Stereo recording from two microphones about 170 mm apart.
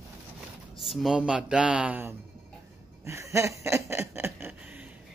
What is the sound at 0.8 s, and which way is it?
Speech, centre (ahead or behind).